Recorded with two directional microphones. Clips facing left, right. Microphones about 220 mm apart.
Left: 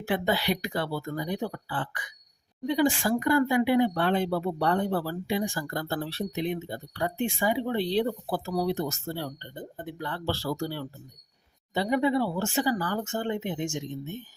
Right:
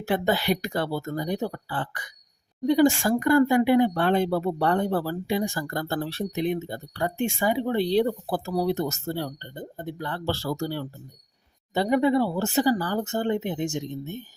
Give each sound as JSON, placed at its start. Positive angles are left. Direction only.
{"t": 0.0, "sound": "speech", "side_deg": -45}